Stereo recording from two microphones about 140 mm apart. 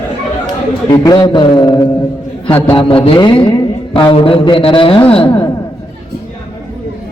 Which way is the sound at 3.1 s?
35° left (ahead or behind).